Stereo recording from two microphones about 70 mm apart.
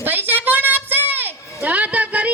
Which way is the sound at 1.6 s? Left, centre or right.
Right.